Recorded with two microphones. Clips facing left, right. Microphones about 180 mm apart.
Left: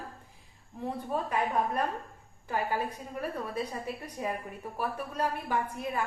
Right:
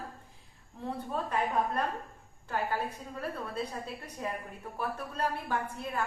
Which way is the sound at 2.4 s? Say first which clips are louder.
Left 2 dB; 10° left (ahead or behind).